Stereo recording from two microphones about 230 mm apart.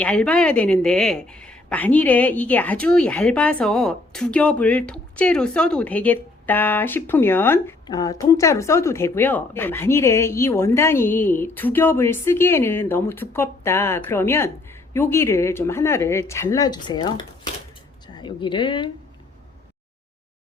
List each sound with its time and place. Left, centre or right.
0.0 s speech: centre; by 18.9 s left